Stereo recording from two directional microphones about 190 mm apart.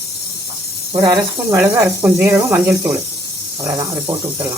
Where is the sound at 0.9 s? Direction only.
20° right (ahead or behind).